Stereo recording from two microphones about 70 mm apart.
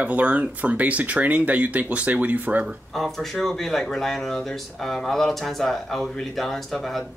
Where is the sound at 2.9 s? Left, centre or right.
Centre.